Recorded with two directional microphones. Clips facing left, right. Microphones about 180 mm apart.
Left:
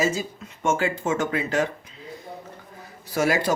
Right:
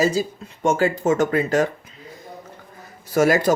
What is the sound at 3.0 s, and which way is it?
Speech, 45° right (ahead or behind).